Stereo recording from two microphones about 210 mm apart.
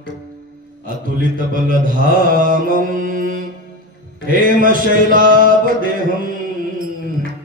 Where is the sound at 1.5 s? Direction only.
40° right (ahead or behind).